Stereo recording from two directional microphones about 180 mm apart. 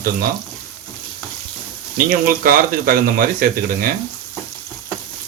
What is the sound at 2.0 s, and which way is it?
Speech, 50° right (ahead or behind).